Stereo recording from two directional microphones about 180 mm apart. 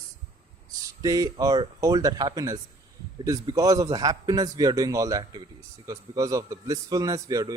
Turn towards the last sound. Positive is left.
turn(degrees=-20)  # may be behind; listen again after turning